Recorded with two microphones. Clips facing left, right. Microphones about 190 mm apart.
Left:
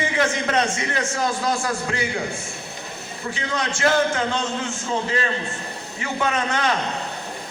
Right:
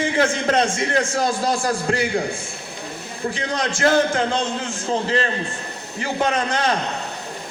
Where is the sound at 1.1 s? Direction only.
35° right (ahead or behind).